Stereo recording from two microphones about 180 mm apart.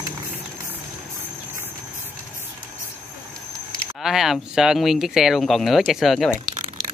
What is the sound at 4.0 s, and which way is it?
Speech, centre (ahead or behind).